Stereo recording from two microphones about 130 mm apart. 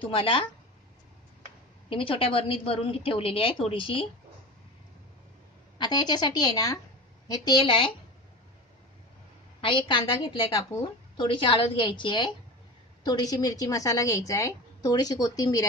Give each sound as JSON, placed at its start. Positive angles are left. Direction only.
{"t": 0.0, "sound": "speech", "side_deg": 45}
{"t": 1.9, "sound": "speech", "side_deg": 45}
{"t": 5.8, "sound": "a woman's voice", "side_deg": 35}
{"t": 9.6, "sound": "a woman's voice", "side_deg": 40}